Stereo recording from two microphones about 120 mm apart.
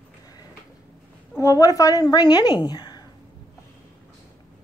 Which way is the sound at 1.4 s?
30° left (ahead or behind).